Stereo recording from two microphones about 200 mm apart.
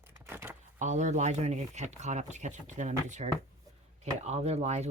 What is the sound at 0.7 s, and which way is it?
Speech, 35° right (ahead or behind).